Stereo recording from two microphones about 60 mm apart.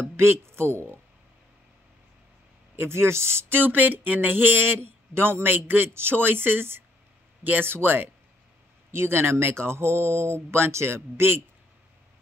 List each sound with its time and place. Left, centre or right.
0.1 s speech: right
2.7 s speech: right